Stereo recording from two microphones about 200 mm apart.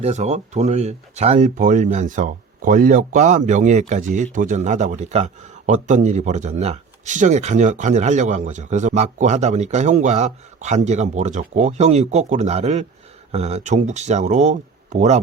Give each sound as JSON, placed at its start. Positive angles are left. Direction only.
{"t": 0.0, "sound": "speech", "side_deg": -35}